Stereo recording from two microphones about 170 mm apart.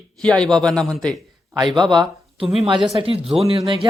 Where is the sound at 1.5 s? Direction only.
25° right (ahead or behind).